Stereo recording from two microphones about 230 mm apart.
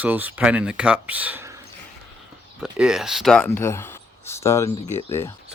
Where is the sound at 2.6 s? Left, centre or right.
Centre.